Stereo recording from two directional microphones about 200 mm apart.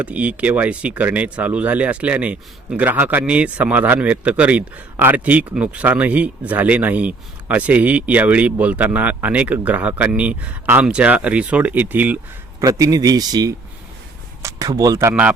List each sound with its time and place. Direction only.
0.0 s speech: 5° right (ahead or behind)